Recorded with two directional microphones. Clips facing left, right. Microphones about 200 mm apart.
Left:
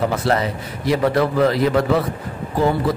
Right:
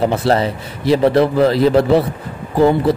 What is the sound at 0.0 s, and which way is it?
A man's voice, 30° right (ahead or behind).